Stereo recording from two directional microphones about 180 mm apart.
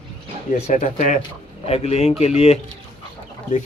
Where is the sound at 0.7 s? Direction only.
45° left (ahead or behind).